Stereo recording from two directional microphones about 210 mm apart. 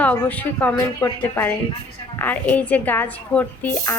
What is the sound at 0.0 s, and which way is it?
A woman's voice, 5° left (ahead or behind).